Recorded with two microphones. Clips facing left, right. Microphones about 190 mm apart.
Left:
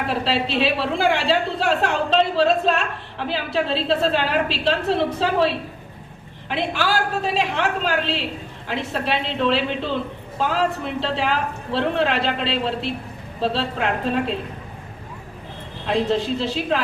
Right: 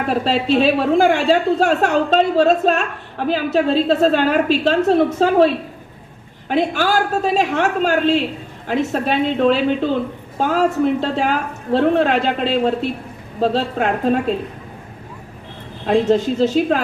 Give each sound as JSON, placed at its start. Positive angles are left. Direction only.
{"t": 0.1, "sound": "a woman's voice", "side_deg": -45}
{"t": 15.9, "sound": "a woman's voice", "side_deg": -45}